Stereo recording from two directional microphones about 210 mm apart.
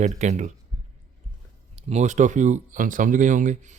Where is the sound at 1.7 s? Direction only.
35° right (ahead or behind).